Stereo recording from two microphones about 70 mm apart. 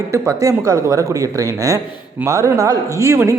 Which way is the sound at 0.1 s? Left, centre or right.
Right.